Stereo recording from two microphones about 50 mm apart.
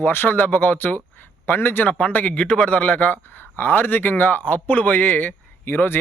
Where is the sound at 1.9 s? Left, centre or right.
Left.